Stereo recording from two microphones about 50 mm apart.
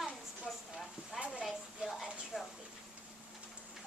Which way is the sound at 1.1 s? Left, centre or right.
Centre.